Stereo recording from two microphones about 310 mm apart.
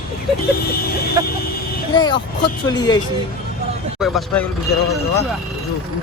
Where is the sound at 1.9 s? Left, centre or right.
Centre.